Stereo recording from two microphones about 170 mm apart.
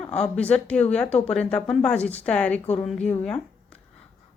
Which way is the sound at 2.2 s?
5° left (ahead or behind).